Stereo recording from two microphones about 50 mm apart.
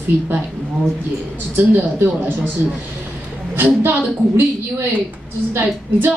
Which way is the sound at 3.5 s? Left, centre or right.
Right.